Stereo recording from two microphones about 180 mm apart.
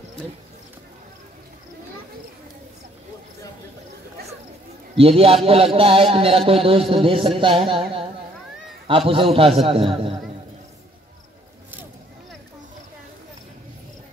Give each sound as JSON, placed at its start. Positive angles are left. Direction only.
{"t": 4.9, "sound": "a man's voice", "side_deg": -30}
{"t": 8.8, "sound": "a man's voice", "side_deg": -30}